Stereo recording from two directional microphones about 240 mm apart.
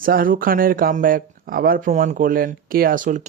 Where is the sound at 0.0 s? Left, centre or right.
Right.